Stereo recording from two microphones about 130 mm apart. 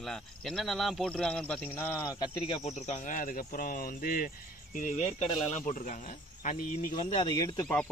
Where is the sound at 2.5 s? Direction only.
60° left (ahead or behind); by 4.3 s 90° left.